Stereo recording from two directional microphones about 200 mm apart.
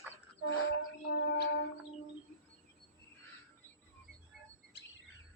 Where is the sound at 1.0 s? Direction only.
50° left (ahead or behind).